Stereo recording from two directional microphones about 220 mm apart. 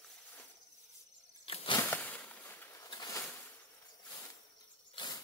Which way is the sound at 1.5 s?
25° left (ahead or behind).